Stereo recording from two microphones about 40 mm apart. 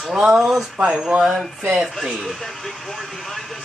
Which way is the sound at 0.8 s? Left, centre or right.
Centre.